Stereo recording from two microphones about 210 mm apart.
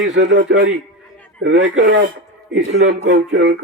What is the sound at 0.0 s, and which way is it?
Speech, 60° right (ahead or behind).